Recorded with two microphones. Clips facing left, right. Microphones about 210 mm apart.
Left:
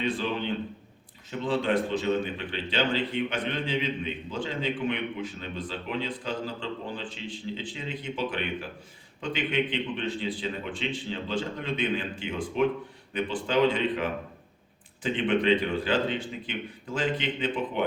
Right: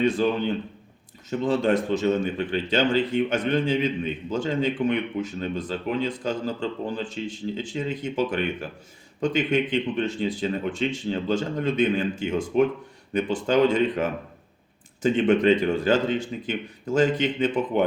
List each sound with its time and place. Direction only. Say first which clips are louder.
0.0 s a man's voice: right 7 dB; 45° right (ahead or behind)